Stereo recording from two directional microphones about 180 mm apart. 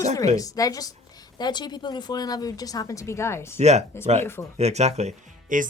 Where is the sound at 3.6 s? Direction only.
35° right (ahead or behind).